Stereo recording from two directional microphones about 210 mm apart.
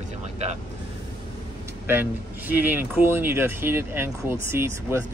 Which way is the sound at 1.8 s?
10° right (ahead or behind).